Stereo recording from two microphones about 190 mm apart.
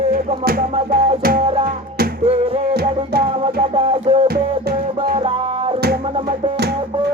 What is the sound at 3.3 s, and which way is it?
Music, 30° right (ahead or behind).